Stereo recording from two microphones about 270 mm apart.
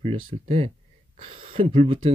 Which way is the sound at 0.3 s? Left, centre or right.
Right.